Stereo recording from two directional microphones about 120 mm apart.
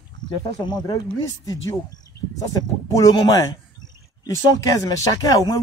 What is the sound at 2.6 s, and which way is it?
Speech, 30° left (ahead or behind).